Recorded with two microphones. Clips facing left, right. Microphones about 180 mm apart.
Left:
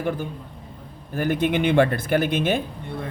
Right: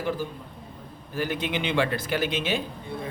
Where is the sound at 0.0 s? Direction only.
55° left (ahead or behind).